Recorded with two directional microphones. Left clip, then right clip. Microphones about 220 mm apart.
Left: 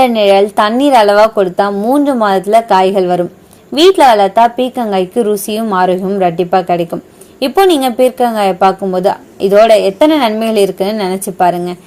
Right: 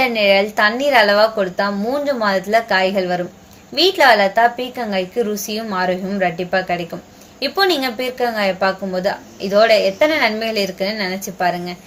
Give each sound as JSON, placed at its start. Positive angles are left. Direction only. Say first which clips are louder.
{"t": 0.0, "sound": "a woman's voice", "louder": "left 6 dB", "side_deg": 35}